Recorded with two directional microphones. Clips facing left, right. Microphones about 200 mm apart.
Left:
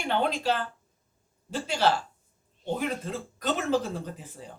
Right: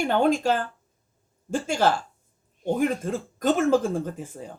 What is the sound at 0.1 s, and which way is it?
Speech, 45° right (ahead or behind).